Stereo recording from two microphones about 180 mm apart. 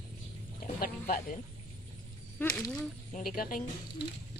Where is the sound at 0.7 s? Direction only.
50° left (ahead or behind).